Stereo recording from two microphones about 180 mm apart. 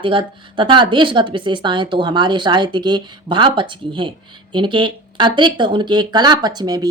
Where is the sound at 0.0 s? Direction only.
25° right (ahead or behind).